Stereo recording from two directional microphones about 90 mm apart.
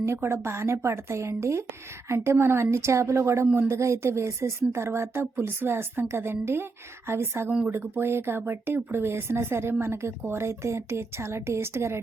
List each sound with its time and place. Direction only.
0.0 s speech: 30° right (ahead or behind)